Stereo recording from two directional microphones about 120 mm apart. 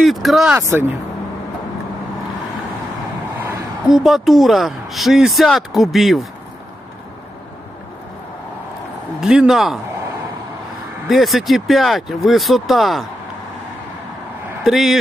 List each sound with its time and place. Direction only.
0.0 s a woman's voice: centre (ahead or behind)
0.6 s speech: 20° right (ahead or behind)
3.8 s a woman's voice: 5° right (ahead or behind)
9.2 s a woman's voice: 5° right (ahead or behind)
11.1 s a woman's voice: centre (ahead or behind)
14.6 s speech: centre (ahead or behind)